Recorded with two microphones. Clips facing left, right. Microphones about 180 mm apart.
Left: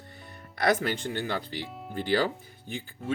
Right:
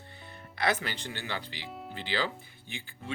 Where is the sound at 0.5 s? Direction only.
50° left (ahead or behind).